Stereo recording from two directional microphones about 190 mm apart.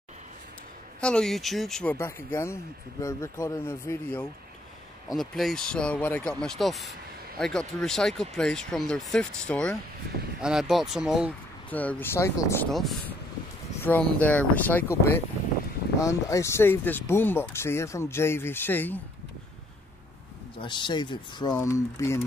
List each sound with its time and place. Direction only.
1.0 s speech: 5° left (ahead or behind)
2.0 s speech: 15° left (ahead or behind)
5.1 s speech: centre (ahead or behind)
11.7 s speech: 10° left (ahead or behind)
12.7 s speech: centre (ahead or behind)
20.5 s speech: 25° left (ahead or behind)